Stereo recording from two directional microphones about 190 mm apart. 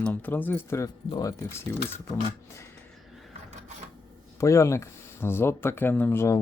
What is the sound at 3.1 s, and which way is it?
Drawer open or close, centre (ahead or behind).